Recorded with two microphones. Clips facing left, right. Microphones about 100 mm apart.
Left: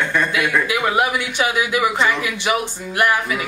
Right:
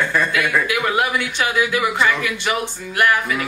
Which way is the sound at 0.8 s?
15° left (ahead or behind).